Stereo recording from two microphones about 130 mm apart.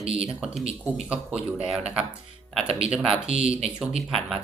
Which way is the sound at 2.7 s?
50° right (ahead or behind).